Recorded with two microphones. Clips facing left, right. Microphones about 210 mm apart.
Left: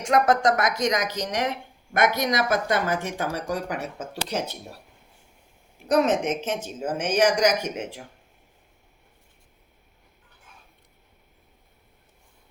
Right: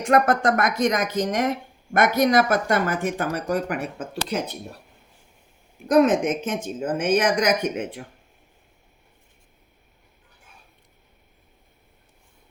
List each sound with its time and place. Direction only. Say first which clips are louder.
0.0 s speech: right 1 dB; 55° right (ahead or behind)
5.9 s speech: right 4 dB; 55° right (ahead or behind)